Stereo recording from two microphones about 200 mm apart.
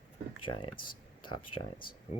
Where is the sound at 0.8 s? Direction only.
45° left (ahead or behind).